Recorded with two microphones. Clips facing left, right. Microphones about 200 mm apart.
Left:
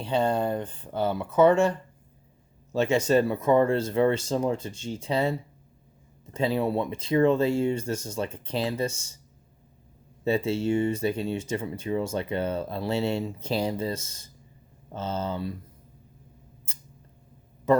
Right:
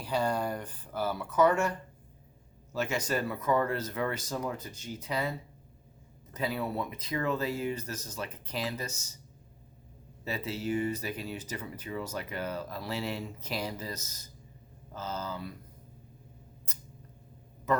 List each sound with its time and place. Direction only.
0.0 s speech: 25° left (ahead or behind)
10.2 s speech: 30° left (ahead or behind)
16.7 s scissors: 30° left (ahead or behind)